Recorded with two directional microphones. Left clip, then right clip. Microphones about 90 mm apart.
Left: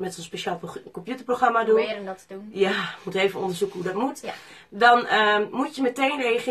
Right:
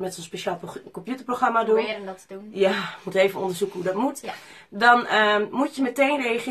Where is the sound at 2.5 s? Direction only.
30° right (ahead or behind).